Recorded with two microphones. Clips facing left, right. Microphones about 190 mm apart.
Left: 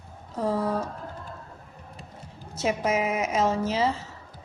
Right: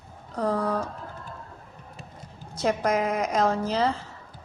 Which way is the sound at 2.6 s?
5° left (ahead or behind).